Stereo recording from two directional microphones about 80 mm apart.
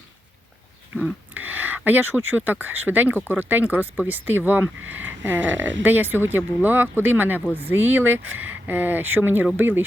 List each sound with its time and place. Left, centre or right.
1.3 s speech: right